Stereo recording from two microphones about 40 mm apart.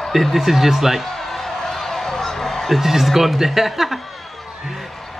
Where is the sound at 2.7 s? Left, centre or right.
Centre.